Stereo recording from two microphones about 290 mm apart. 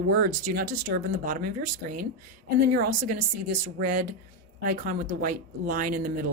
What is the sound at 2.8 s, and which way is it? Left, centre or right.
Speech, right.